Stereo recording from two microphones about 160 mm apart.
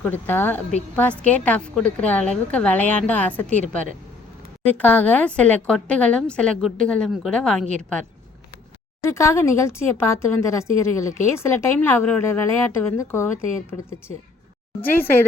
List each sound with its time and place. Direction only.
0.0 s speech: 10° left (ahead or behind)
4.6 s a woman's voice: 10° left (ahead or behind)
9.0 s speech: 15° left (ahead or behind)
14.8 s speech: 10° left (ahead or behind)